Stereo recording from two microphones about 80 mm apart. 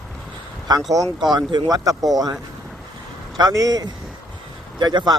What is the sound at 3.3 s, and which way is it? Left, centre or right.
A man's voice, right.